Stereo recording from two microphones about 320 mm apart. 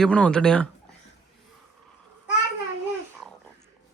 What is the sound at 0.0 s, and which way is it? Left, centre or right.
Speech, centre.